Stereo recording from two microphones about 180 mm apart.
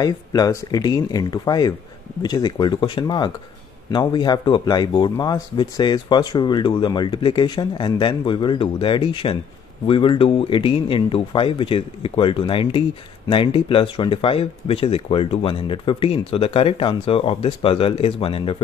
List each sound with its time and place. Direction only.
0.0 s speech: 20° left (ahead or behind)